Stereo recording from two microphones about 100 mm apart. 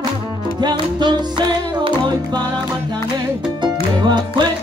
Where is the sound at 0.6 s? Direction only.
45° right (ahead or behind).